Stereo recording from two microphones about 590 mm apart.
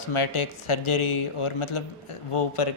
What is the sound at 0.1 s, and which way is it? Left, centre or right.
Speech, left.